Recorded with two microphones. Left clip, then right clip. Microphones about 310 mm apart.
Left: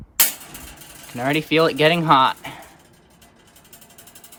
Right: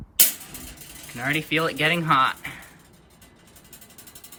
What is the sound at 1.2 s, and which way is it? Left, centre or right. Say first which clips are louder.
Speech: left 6 dB; centre.